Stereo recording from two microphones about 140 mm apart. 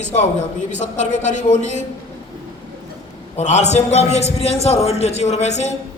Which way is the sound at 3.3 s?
55° left (ahead or behind).